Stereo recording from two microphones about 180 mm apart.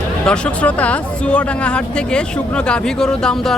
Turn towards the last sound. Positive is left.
turn(degrees=0)  # may be behind; listen again after turning